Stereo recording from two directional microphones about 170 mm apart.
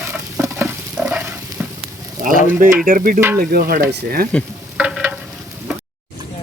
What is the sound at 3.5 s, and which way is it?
Speech, 60° right (ahead or behind).